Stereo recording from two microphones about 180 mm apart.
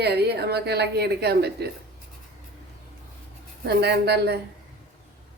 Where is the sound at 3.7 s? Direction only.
65° right (ahead or behind).